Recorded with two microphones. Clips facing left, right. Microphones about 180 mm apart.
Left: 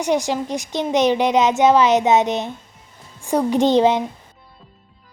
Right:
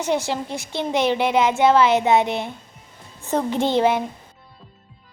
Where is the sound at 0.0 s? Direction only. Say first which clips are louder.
Left 3 dB; 15° left (ahead or behind).